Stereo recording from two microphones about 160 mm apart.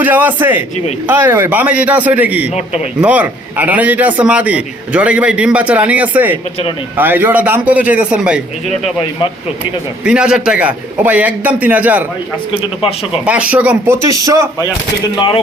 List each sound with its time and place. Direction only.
0.0 s a man's voice: 10° right (ahead or behind)
10.0 s a man's voice: 5° right (ahead or behind)
13.2 s a man's voice: 10° right (ahead or behind)
14.1 s speech: 20° right (ahead or behind)